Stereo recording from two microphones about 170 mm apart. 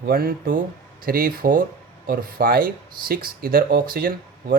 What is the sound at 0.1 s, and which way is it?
Speech, 60° right (ahead or behind).